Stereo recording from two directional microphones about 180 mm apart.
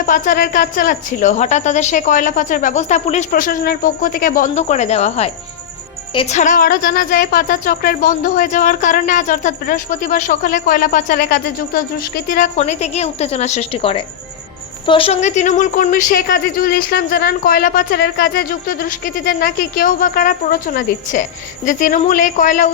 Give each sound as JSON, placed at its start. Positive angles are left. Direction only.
{"t": 0.0, "sound": "a woman's voice", "side_deg": 50}
{"t": 12.5, "sound": "a woman's voice", "side_deg": 35}